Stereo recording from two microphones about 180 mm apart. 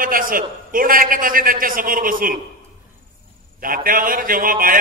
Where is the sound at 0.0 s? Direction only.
50° right (ahead or behind).